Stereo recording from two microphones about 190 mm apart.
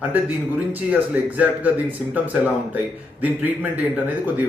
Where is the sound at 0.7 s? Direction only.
10° right (ahead or behind).